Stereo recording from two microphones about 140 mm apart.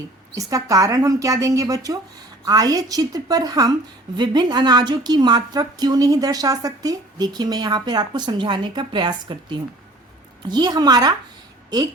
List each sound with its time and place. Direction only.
0.3 s a woman's voice: 25° right (ahead or behind)